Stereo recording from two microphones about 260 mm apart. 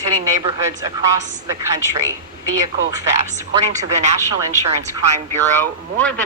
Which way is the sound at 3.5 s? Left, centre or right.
Centre.